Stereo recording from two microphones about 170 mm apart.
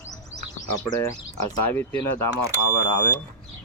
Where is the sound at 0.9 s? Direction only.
15° left (ahead or behind).